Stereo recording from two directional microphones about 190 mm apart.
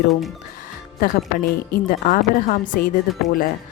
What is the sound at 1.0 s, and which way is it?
Speech, 45° left (ahead or behind).